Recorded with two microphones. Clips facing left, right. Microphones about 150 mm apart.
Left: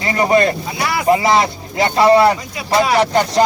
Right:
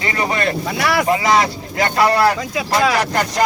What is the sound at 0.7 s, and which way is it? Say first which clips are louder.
Speech: right 2 dB; 80° right.